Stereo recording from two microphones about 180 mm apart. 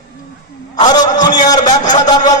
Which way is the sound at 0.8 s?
20° left (ahead or behind).